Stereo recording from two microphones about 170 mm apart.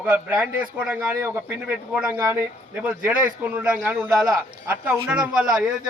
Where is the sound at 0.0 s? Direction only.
10° right (ahead or behind).